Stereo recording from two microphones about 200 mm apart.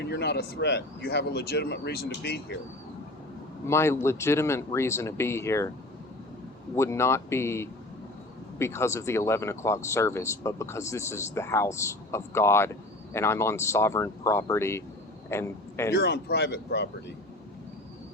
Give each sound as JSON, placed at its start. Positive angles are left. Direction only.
{"t": 0.0, "sound": "speech", "side_deg": 60}
{"t": 3.7, "sound": "speech", "side_deg": 15}
{"t": 6.7, "sound": "a man's voice", "side_deg": 15}
{"t": 15.9, "sound": "speech", "side_deg": 55}